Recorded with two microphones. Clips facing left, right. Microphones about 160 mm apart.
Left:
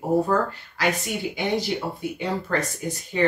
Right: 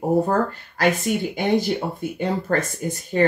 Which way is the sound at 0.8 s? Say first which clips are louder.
Right 5 dB; 50° right (ahead or behind).